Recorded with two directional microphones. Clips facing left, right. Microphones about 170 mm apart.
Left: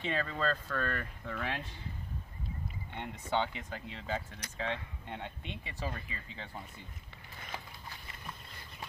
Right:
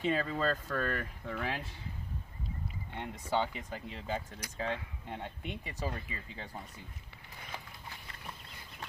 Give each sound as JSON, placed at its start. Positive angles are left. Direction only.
{"t": 0.0, "sound": "speech", "side_deg": -5}
{"t": 2.9, "sound": "speech", "side_deg": -5}
{"t": 5.5, "sound": "speech", "side_deg": -45}
{"t": 5.9, "sound": "speech", "side_deg": -10}